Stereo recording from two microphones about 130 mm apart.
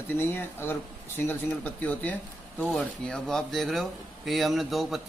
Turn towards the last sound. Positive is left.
turn(degrees=0)  # may be behind; listen again after turning